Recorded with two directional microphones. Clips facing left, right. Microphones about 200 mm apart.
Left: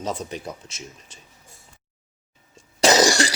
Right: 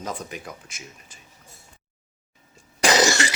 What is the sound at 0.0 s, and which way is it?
Speech, 30° left (ahead or behind).